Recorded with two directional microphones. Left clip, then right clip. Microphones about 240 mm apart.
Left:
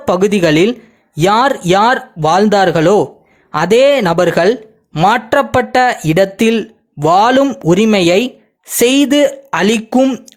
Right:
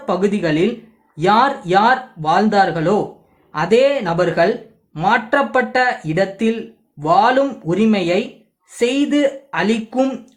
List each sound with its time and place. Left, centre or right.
0.0 s speech: left